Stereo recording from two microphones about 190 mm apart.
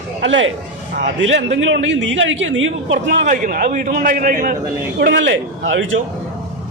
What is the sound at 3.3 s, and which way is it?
A man's voice, 45° right (ahead or behind).